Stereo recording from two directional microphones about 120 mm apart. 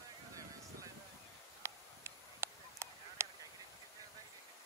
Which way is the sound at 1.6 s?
20° right (ahead or behind).